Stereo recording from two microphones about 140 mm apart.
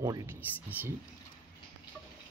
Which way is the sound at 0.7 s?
15° right (ahead or behind).